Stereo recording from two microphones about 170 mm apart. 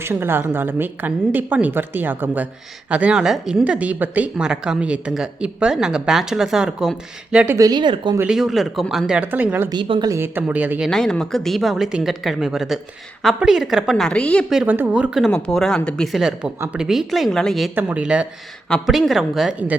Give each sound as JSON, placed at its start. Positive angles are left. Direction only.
{"t": 0.0, "sound": "a woman's voice", "side_deg": -15}
{"t": 8.2, "sound": "speech", "side_deg": -5}
{"t": 9.6, "sound": "speech", "side_deg": -30}
{"t": 10.1, "sound": "speech", "side_deg": -15}
{"t": 14.6, "sound": "speech", "side_deg": -10}
{"t": 17.7, "sound": "a woman's voice", "side_deg": -10}